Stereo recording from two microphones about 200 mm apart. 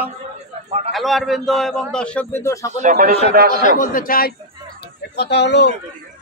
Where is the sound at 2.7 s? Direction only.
40° right (ahead or behind).